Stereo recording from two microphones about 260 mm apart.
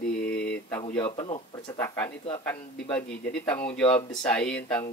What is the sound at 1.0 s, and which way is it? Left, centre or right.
Speech, centre.